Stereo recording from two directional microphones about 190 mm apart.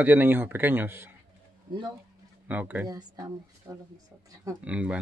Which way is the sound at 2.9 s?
20° right (ahead or behind).